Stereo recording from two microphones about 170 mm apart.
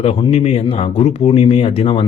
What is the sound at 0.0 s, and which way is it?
Speech, 35° left (ahead or behind).